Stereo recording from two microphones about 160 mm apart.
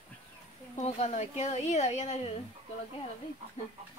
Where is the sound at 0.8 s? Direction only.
45° left (ahead or behind).